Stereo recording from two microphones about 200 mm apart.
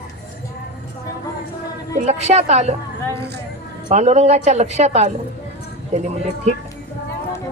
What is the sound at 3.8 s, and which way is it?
Speech, 35° right (ahead or behind).